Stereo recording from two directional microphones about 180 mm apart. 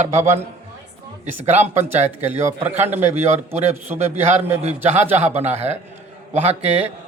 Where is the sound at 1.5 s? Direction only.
40° right (ahead or behind).